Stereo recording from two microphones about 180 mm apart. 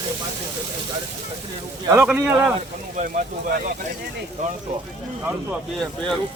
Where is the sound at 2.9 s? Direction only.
50° right (ahead or behind).